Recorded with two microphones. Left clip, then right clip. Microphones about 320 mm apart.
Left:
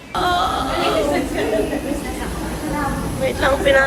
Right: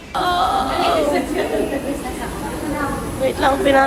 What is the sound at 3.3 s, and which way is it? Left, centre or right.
Music, centre.